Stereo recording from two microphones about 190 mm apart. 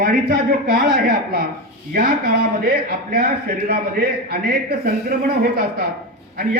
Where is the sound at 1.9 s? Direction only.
50° right (ahead or behind).